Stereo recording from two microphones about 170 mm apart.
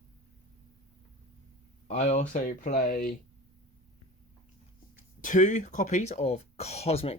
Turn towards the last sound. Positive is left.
turn(degrees=35)  # may be behind; listen again after turning